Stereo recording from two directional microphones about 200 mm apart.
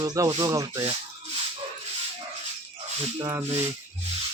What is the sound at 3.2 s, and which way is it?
Speech, 20° right (ahead or behind).